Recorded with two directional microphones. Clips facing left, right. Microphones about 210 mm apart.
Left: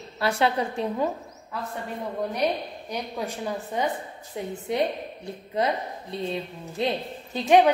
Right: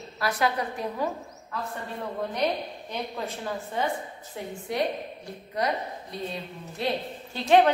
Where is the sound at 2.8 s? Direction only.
15° left (ahead or behind).